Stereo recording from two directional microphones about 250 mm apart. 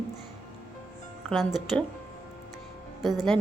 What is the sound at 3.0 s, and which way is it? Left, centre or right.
Speech, centre.